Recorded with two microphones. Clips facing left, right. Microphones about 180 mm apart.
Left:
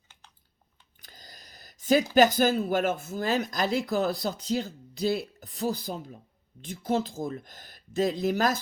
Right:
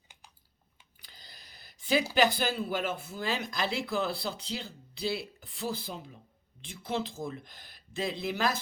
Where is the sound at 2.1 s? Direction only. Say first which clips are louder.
Left 6 dB; 45° left (ahead or behind).